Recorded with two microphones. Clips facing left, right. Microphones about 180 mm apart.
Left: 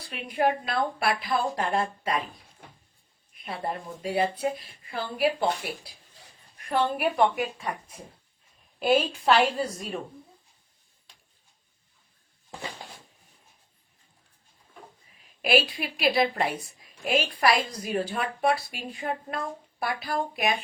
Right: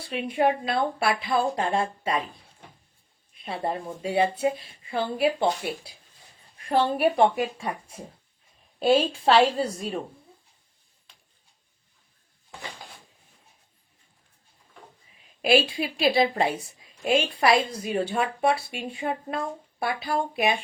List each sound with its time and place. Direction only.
0.0 s a woman's voice: 25° right (ahead or behind)
3.3 s a woman's voice: 25° right (ahead or behind)
15.4 s a woman's voice: 25° right (ahead or behind)